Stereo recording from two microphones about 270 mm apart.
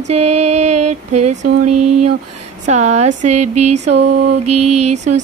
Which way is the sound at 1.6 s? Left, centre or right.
Right.